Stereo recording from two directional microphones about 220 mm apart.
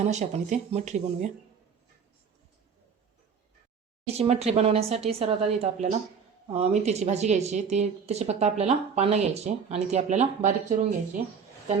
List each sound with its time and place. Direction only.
0.0 s speech: 30° right (ahead or behind)
4.0 s a woman's voice: 30° right (ahead or behind)